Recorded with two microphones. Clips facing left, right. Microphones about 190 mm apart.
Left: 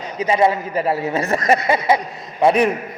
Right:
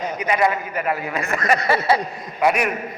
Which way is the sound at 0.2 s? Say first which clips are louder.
Left 5 dB; 25° left (ahead or behind).